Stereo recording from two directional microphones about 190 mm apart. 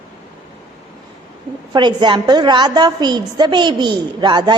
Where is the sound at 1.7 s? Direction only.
25° right (ahead or behind).